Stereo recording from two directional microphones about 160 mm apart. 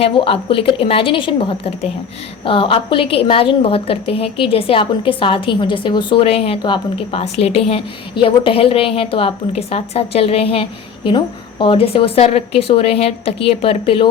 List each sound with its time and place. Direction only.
0.0 s a woman's voice: 35° left (ahead or behind)